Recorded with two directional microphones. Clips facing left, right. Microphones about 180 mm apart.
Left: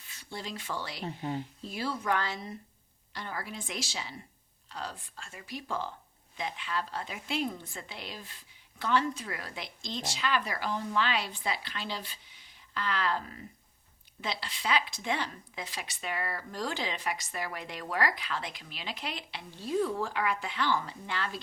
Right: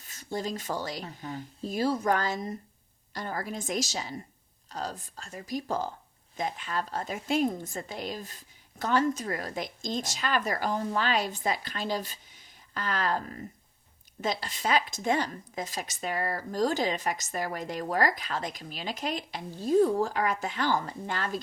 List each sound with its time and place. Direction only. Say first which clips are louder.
0.0 s speech: right 8 dB; 45° right (ahead or behind)
1.0 s speech: left 4 dB; 25° left (ahead or behind)
1.6 s a woman's voice: right 8 dB; 40° right (ahead or behind)